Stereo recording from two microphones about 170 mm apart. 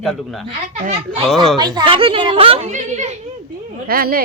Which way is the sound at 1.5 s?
25° right (ahead or behind).